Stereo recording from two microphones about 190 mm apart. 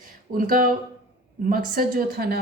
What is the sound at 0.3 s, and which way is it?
Speech, 45° right (ahead or behind).